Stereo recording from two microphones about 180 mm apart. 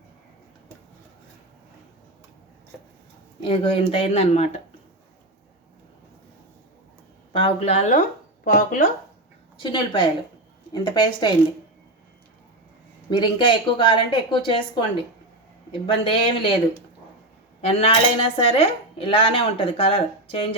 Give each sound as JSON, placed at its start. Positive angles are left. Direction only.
{"t": 3.4, "sound": "speech", "side_deg": 30}
{"t": 7.3, "sound": "speech", "side_deg": 35}
{"t": 8.5, "sound": "speech", "side_deg": 50}
{"t": 9.6, "sound": "a woman's voice", "side_deg": 25}
{"t": 13.1, "sound": "a woman's voice", "side_deg": 25}
{"t": 15.9, "sound": "a woman's voice", "side_deg": 30}
{"t": 17.6, "sound": "speech", "side_deg": 30}